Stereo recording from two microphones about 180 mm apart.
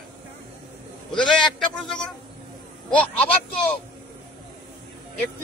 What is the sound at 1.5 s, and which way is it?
A man's voice, 5° left (ahead or behind).